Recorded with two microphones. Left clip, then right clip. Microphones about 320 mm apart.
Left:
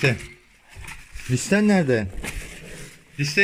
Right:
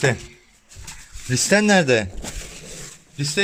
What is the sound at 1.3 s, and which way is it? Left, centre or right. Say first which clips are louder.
Speech: right 5 dB; right.